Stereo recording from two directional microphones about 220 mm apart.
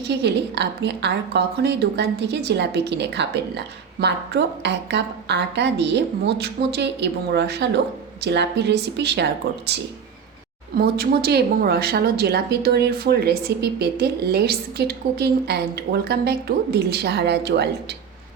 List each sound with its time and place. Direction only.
0.1 s a woman's voice: 50° right (ahead or behind)
10.8 s a woman's voice: 45° right (ahead or behind)